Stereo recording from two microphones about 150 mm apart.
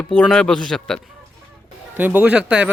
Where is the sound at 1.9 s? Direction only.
10° right (ahead or behind).